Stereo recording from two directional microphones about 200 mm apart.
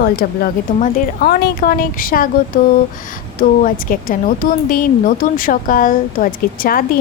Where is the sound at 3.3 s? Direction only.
40° left (ahead or behind).